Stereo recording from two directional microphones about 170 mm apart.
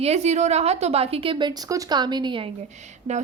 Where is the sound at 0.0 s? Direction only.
40° right (ahead or behind).